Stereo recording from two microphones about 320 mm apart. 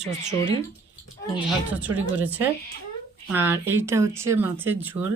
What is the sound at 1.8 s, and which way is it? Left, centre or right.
A woman's voice, centre.